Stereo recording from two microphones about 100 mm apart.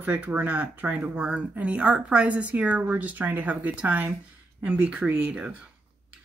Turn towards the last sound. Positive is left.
turn(degrees=-10)  # may be behind; listen again after turning